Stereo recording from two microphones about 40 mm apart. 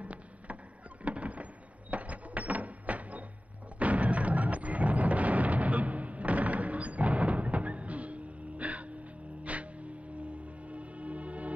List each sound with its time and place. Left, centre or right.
0.0 s cat: right
1.0 s a sound: right
3.8 s music: right